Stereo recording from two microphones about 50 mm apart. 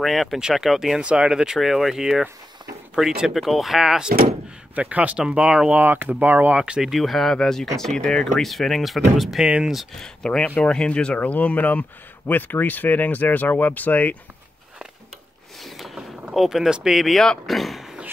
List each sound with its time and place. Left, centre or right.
0.0 s speech: centre
1.0 s speech: right
1.6 s speech: centre
4.7 s speech: right
5.7 s speech: right
6.5 s speech: centre
6.9 s speech: centre
8.4 s speech: centre
9.4 s speech: centre
9.9 s speech: centre
11.1 s speech: left
15.6 s boat: centre
16.3 s speech: centre
17.0 s speech: centre